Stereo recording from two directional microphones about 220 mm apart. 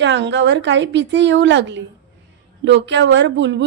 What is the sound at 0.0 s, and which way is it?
Speech, 55° right (ahead or behind).